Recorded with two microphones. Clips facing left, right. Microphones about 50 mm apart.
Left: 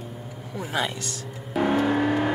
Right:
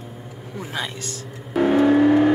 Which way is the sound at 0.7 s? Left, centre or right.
Left.